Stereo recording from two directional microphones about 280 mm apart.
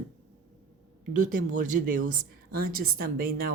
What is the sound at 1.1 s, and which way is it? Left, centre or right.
Speech, right.